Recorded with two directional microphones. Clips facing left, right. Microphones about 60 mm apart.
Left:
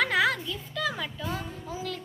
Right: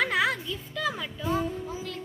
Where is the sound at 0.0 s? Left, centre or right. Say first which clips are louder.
Left 1 dB; centre.